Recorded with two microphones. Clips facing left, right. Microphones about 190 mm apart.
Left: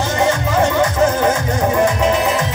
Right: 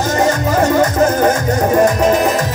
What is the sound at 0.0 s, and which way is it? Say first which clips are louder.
Music: right 2 dB; 40° right (ahead or behind).